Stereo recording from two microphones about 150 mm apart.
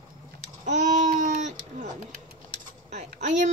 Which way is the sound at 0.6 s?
55° right (ahead or behind).